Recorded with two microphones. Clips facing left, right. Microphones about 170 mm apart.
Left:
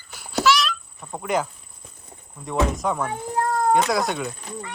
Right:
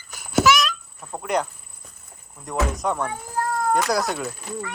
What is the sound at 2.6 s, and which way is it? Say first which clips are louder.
Speech: even; centre (ahead or behind).